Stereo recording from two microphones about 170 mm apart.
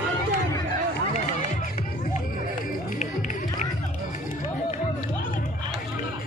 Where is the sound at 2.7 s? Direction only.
50° left (ahead or behind).